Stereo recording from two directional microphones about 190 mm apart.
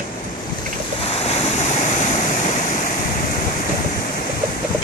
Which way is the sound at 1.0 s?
30° left (ahead or behind).